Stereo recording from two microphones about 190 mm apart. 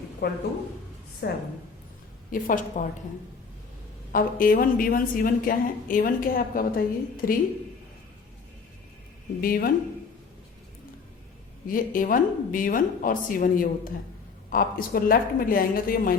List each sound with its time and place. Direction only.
0.2 s a man's voice: 60° left (ahead or behind)
2.3 s a woman's voice: 45° left (ahead or behind)
4.1 s a woman's voice: 50° left (ahead or behind)
9.4 s a woman's voice: 50° left (ahead or behind)
11.6 s a woman's voice: 45° left (ahead or behind)